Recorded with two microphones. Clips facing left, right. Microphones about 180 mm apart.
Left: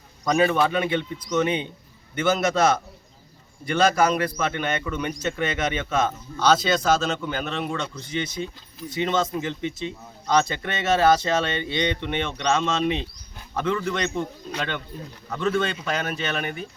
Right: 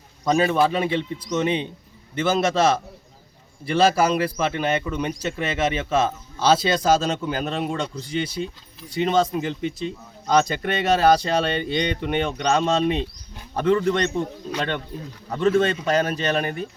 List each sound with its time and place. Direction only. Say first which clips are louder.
0.3 s a man's voice: right 1 dB; 30° right (ahead or behind)
15.3 s a man's voice: right 5 dB; 35° right (ahead or behind)